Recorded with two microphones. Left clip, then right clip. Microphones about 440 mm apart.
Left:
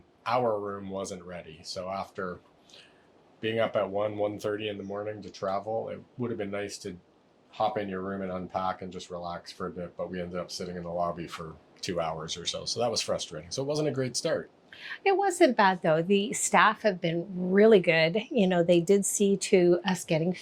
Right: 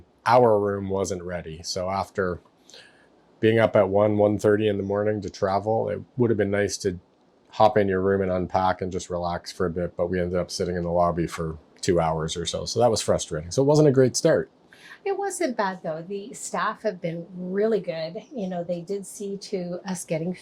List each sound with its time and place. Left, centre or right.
0.3 s speech: right
3.4 s speech: right
14.8 s a woman's voice: left
15.7 s a woman's voice: left
16.5 s a woman's voice: left
19.8 s speech: centre